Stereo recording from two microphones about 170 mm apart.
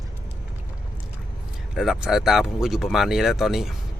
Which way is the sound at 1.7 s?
5° right (ahead or behind).